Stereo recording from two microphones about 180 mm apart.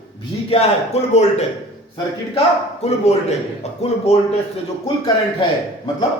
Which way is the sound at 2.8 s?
35° left (ahead or behind).